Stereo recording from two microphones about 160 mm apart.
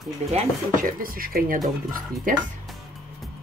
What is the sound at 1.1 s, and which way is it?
Speech, 65° right (ahead or behind).